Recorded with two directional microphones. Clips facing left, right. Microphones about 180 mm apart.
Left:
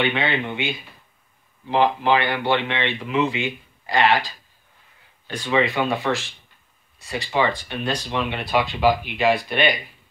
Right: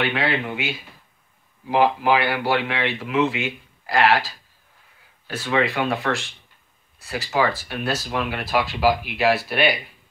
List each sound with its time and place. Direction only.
0.0 s speech: 5° right (ahead or behind)